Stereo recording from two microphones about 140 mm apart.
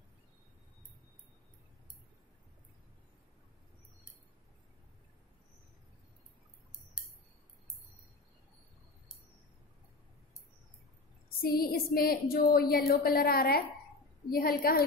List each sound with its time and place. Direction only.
11.2 s a woman's voice: 90° left